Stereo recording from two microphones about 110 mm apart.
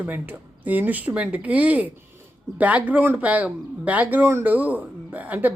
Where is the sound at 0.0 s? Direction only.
15° right (ahead or behind).